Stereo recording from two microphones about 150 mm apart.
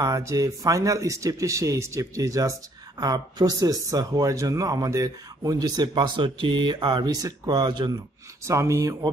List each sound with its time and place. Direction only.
0.0 s speech: 20° right (ahead or behind)